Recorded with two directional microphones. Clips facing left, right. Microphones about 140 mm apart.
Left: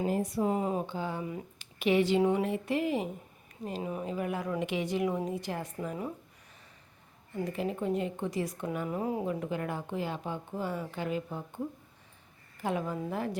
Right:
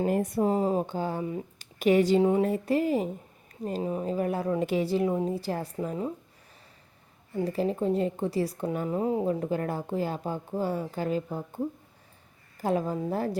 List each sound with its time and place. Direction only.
0.1 s speech: 55° right (ahead or behind)
0.4 s a woman's voice: 35° right (ahead or behind)
7.3 s a woman's voice: 35° right (ahead or behind)